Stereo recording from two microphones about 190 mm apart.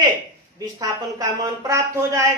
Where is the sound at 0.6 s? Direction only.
20° right (ahead or behind).